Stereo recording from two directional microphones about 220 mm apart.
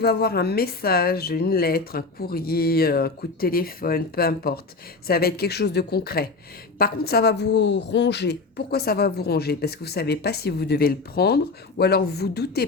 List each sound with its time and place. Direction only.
0.0 s a woman's voice: 45° left (ahead or behind)